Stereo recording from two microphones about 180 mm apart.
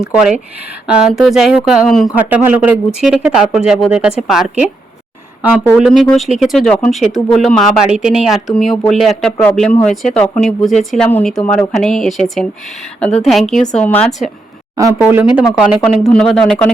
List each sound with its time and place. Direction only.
0.0 s speech: 5° right (ahead or behind)
5.8 s speech: centre (ahead or behind)
14.8 s speech: 20° right (ahead or behind)
15.0 s speech: 5° right (ahead or behind)